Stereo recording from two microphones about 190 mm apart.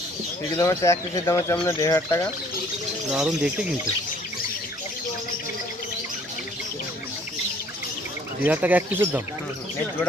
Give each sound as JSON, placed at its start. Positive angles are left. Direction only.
{"t": 0.5, "sound": "speech", "side_deg": 20}
{"t": 3.1, "sound": "speech", "side_deg": -5}
{"t": 8.4, "sound": "speech", "side_deg": -10}